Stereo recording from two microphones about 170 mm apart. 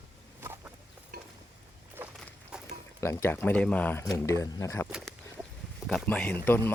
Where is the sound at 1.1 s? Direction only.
65° right (ahead or behind).